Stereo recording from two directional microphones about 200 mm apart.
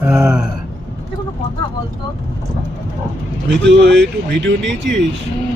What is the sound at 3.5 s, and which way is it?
Speech, 60° right (ahead or behind).